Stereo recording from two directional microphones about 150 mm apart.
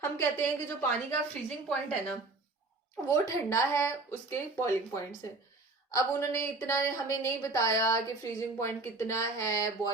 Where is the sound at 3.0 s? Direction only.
20° left (ahead or behind).